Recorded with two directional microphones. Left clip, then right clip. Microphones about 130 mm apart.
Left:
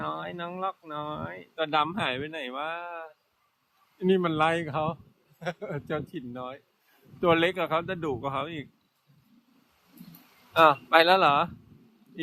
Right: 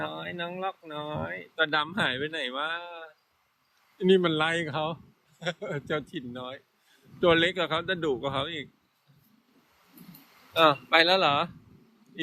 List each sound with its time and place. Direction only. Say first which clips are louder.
0.0 s speech: even; 15° left (ahead or behind)
10.5 s speech: left 2 dB; 40° left (ahead or behind)